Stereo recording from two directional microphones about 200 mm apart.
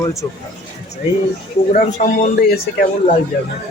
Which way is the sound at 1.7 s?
40° left (ahead or behind).